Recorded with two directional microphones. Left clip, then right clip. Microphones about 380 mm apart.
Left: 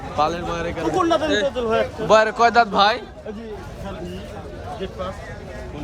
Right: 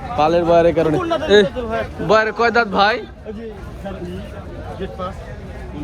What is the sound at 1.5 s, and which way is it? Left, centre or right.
Speech, left.